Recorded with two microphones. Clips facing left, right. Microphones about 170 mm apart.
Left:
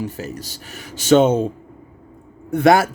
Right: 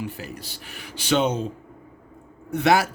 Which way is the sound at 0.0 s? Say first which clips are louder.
Left 5 dB; 40° left (ahead or behind).